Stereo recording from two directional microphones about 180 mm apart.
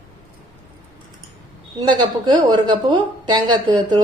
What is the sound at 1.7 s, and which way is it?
A woman's voice, 25° right (ahead or behind).